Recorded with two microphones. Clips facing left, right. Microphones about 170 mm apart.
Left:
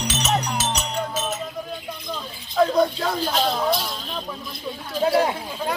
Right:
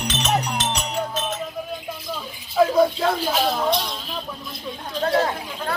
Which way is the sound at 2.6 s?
5° right (ahead or behind).